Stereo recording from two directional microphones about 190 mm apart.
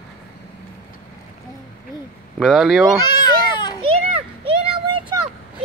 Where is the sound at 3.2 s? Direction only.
25° left (ahead or behind).